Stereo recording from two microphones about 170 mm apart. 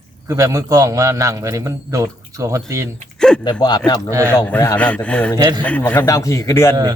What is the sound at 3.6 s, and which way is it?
Speech, 25° left (ahead or behind).